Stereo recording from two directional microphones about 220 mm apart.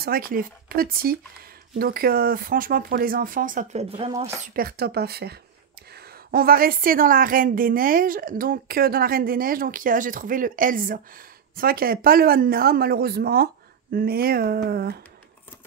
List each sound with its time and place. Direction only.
0.0 s a woman's voice: 40° right (ahead or behind); by 4.3 s 25° right (ahead or behind)
4.6 s a woman's voice: 45° right (ahead or behind)